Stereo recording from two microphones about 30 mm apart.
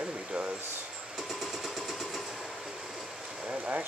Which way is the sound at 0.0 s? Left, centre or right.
Right.